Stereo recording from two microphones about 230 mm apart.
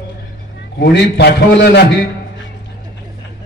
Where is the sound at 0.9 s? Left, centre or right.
Left.